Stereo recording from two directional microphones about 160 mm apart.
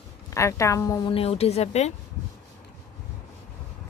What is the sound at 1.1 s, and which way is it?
Speech, 40° left (ahead or behind).